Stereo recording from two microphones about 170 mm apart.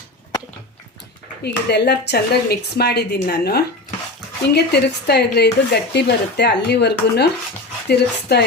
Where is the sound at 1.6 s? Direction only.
75° left (ahead or behind).